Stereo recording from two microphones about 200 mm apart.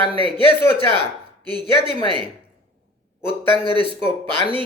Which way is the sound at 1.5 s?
20° right (ahead or behind).